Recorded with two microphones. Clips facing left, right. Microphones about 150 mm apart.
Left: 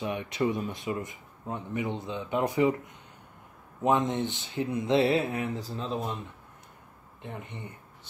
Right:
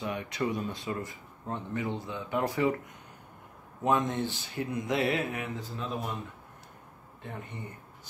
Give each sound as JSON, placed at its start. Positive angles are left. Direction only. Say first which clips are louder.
{"t": 0.0, "sound": "speech", "louder": "left 3 dB", "side_deg": 20}
{"t": 3.8, "sound": "speech", "louder": "left 2 dB", "side_deg": 20}